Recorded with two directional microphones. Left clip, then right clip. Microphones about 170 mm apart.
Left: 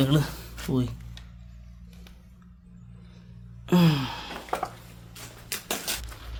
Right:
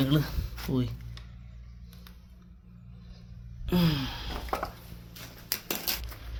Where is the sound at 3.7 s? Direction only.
30° left (ahead or behind).